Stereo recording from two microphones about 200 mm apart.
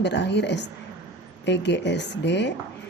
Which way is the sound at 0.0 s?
60° left (ahead or behind).